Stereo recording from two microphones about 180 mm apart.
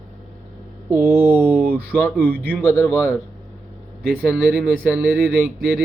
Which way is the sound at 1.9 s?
10° left (ahead or behind).